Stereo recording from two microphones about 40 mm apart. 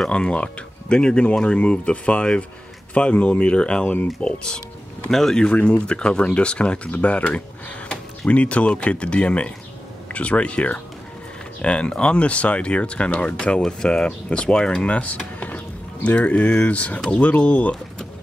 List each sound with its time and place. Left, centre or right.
0.1 s speech: left
5.1 s speech: centre
5.5 s speech: left
13.7 s speech: left
14.9 s speech: left